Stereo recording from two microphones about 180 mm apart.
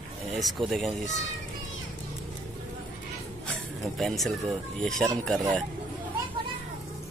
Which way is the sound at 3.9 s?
Centre (ahead or behind).